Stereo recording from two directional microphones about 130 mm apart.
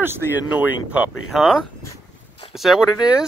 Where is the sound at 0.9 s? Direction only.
Centre (ahead or behind).